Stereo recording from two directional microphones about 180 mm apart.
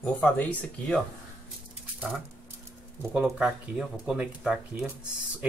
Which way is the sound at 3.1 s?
5° right (ahead or behind).